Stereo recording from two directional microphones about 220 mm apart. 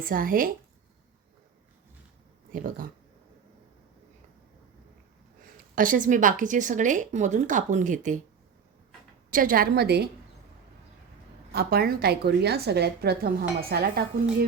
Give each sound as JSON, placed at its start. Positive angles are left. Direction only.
{"t": 0.1, "sound": "a woman's voice", "side_deg": -40}
{"t": 2.5, "sound": "a woman's voice", "side_deg": -35}
{"t": 5.7, "sound": "a woman's voice", "side_deg": -40}
{"t": 9.3, "sound": "a woman's voice", "side_deg": -40}
{"t": 11.5, "sound": "a woman's voice", "side_deg": -45}